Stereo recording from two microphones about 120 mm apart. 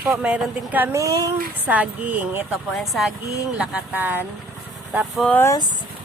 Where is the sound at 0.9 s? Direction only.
25° right (ahead or behind).